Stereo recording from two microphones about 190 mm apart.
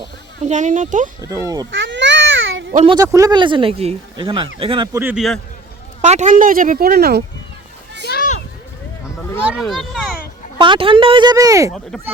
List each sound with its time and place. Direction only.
0.4 s speech: 40° right (ahead or behind)
1.2 s a child's voice: 15° right (ahead or behind)
1.7 s babbling: 70° right (ahead or behind)
2.8 s speech: 20° right (ahead or behind)
4.9 s a child's voice: 10° right (ahead or behind)
6.0 s speech: 40° right (ahead or behind); by 7.2 s 55° right (ahead or behind)
8.0 s a sound: 55° left (ahead or behind)
9.5 s speech: centre (ahead or behind)
10.6 s speech: 25° right (ahead or behind)